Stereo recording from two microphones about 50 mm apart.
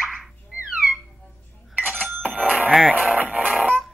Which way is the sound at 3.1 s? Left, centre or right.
Right.